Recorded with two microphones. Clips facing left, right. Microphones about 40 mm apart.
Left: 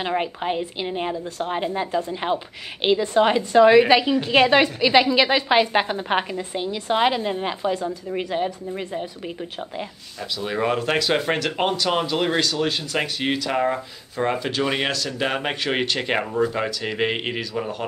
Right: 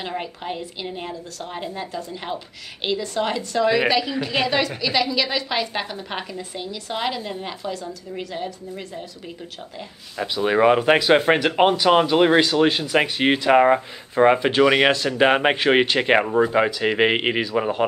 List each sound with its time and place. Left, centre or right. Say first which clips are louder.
0.0 s a woman's voice: left 5 dB; left
10.1 s speech: right 7 dB; right
14.6 s speech: right 8 dB; right
14.9 s speech: right 7 dB; right